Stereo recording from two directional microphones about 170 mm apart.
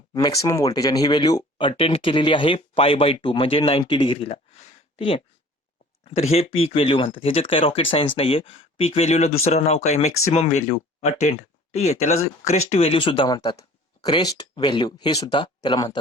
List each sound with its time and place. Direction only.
0.1 s speech: 20° left (ahead or behind)